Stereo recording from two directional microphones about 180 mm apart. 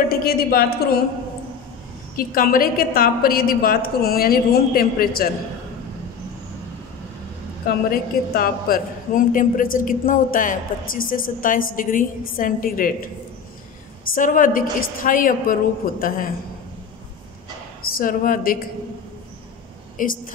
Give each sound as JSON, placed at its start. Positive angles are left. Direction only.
{"t": 0.1, "sound": "a woman's voice", "side_deg": 55}
{"t": 2.1, "sound": "a woman's voice", "side_deg": 55}
{"t": 7.6, "sound": "a woman's voice", "side_deg": 55}
{"t": 14.1, "sound": "a woman's voice", "side_deg": 50}
{"t": 17.8, "sound": "a woman's voice", "side_deg": 55}
{"t": 20.0, "sound": "a woman's voice", "side_deg": 50}